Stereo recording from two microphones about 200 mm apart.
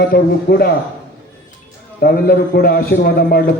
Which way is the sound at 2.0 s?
45° left (ahead or behind).